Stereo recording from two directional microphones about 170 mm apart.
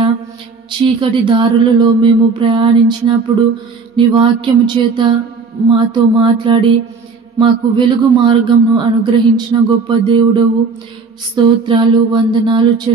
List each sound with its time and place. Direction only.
0.7 s a man's voice: 30° right (ahead or behind)